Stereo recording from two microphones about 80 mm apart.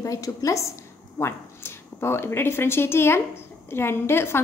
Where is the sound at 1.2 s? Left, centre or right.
Left.